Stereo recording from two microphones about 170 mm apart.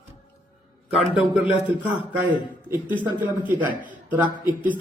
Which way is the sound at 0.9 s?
Centre (ahead or behind).